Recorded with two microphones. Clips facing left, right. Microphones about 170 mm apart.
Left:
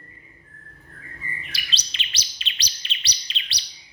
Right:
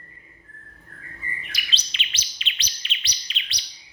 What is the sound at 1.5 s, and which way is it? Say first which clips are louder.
Chirp: even; 35° left (ahead or behind).